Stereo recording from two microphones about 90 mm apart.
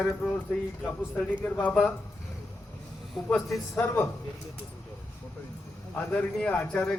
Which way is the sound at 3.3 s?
Centre (ahead or behind).